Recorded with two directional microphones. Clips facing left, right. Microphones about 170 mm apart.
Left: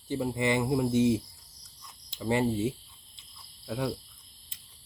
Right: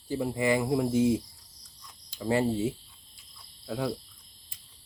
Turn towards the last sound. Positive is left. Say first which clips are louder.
# right 1 dB
turn(degrees=20)  # may be behind; listen again after turning